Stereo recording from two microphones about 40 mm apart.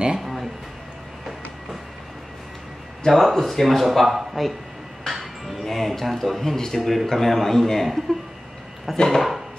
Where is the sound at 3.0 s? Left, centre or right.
Centre.